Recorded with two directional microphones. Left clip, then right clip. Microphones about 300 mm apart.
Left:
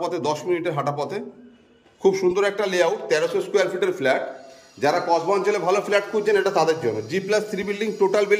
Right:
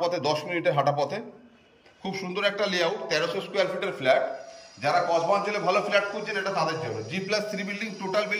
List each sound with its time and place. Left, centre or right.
0.0 s a man's voice: centre